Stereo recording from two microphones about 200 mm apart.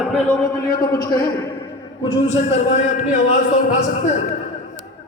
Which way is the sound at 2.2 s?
35° left (ahead or behind).